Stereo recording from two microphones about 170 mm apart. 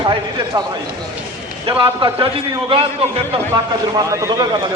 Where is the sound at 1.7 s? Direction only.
30° right (ahead or behind).